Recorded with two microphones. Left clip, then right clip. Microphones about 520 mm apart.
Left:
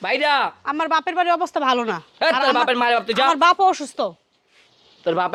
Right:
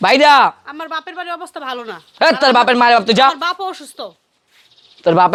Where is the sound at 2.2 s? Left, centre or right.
Right.